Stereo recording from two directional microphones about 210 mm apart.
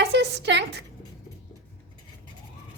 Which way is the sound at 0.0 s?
55° right (ahead or behind).